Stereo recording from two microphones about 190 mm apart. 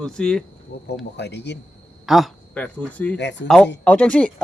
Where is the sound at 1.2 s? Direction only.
65° left (ahead or behind).